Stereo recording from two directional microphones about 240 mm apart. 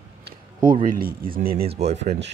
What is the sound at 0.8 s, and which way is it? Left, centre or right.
Speech, right.